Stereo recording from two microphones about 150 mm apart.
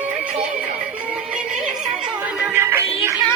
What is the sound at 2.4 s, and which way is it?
Music, 15° right (ahead or behind).